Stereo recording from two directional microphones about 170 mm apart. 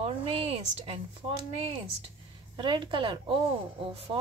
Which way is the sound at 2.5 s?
25° right (ahead or behind).